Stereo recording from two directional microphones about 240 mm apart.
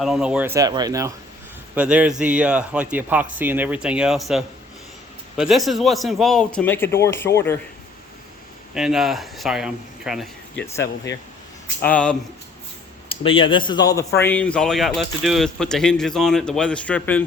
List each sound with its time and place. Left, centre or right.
0.0 s speech: centre
8.7 s speech: centre
11.8 s speech: centre
13.1 s speech: left; by 17.2 s centre